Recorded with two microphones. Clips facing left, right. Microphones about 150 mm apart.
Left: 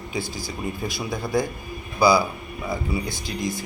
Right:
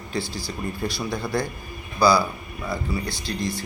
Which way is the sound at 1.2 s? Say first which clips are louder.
Left 4 dB; 20° left (ahead or behind).